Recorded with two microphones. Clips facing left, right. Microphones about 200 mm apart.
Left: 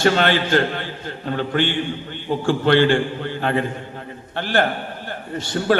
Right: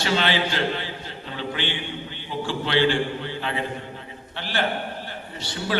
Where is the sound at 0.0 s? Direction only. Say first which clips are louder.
Left 6 dB; 50° left (ahead or behind).